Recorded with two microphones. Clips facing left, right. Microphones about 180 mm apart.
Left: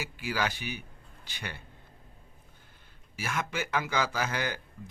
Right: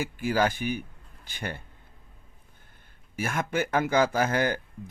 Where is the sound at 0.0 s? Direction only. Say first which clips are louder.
Right 7 dB; 50° right (ahead or behind).